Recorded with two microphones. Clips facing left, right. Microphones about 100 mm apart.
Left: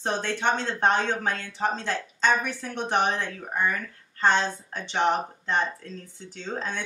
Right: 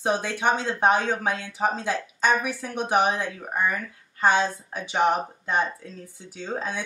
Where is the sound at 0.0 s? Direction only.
10° right (ahead or behind).